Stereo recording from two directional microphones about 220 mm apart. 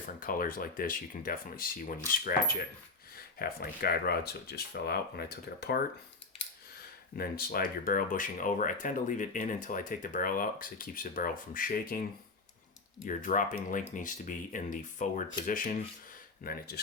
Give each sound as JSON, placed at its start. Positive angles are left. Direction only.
{"t": 0.2, "sound": "speech", "side_deg": 40}
{"t": 7.2, "sound": "speech", "side_deg": 40}
{"t": 13.1, "sound": "speech", "side_deg": 35}